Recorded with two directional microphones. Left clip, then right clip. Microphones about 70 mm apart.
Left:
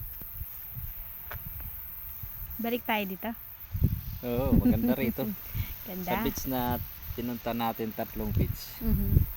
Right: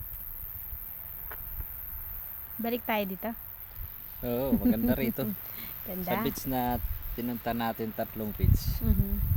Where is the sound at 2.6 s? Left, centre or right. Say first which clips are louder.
Even; centre.